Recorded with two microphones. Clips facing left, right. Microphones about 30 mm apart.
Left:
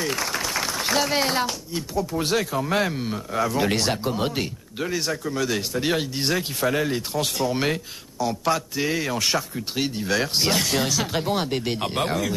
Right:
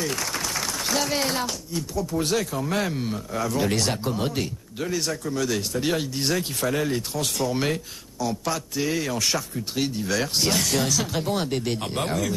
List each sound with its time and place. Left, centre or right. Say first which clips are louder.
0.0 s speech: left 2 dB; centre